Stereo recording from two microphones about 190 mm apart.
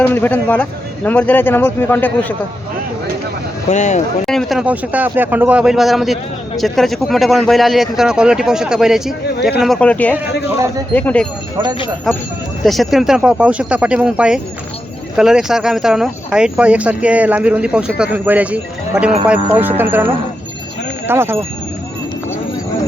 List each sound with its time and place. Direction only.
0.0 s a man's voice: 10° left (ahead or behind)
3.7 s speech: 40° left (ahead or behind)
4.3 s a man's voice: centre (ahead or behind)
12.6 s speech: centre (ahead or behind)
21.1 s speech: 10° right (ahead or behind)